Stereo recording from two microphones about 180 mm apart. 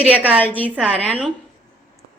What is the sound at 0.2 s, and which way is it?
Speech, 10° right (ahead or behind).